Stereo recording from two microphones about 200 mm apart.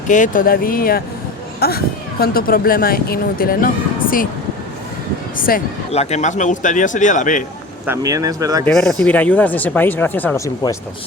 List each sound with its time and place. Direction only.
0.1 s speech: 40° left (ahead or behind)
5.4 s speech: 45° left (ahead or behind)
5.9 s speech: 35° left (ahead or behind)
7.9 s speech: 15° right (ahead or behind)
8.6 s speech: centre (ahead or behind)